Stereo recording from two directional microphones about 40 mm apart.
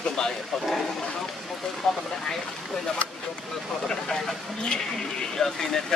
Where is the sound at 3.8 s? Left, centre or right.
Centre.